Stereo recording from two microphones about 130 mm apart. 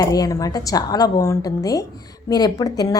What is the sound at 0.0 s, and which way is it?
A woman's voice, 30° left (ahead or behind).